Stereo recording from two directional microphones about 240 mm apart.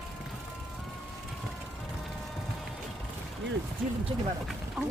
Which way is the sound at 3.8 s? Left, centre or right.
Centre.